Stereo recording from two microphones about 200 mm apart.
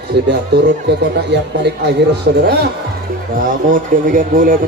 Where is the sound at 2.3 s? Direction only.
55° right (ahead or behind).